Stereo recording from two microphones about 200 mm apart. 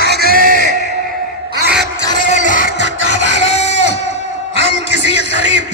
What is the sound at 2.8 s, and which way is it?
Music, 65° right (ahead or behind).